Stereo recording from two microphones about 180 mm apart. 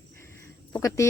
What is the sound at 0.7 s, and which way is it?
Speech, 15° left (ahead or behind).